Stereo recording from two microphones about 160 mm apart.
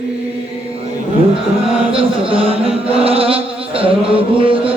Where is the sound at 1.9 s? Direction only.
35° right (ahead or behind).